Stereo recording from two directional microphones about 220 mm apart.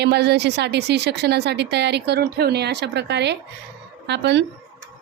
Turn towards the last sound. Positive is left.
turn(degrees=-50)  # may be behind; listen again after turning